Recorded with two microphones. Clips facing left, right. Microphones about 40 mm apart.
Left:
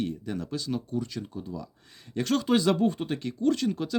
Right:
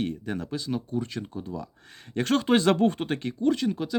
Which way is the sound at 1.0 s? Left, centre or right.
Right.